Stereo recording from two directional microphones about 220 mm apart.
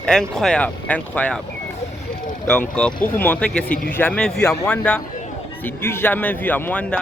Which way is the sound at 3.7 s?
40° left (ahead or behind).